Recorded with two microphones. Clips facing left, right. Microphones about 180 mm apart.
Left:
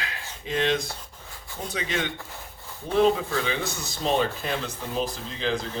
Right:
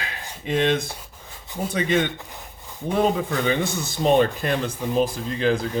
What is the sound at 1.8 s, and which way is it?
Speech, 55° right (ahead or behind).